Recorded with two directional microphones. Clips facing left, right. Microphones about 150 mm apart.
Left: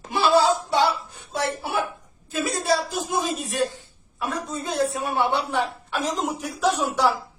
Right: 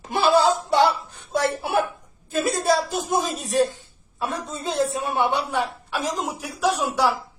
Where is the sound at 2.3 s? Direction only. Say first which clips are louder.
Right 2 dB; 50° right (ahead or behind).